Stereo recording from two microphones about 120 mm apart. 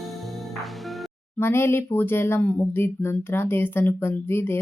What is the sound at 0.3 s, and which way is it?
Music, centre (ahead or behind).